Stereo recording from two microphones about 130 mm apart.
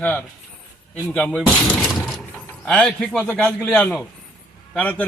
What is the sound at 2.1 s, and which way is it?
Mechanisms, centre (ahead or behind).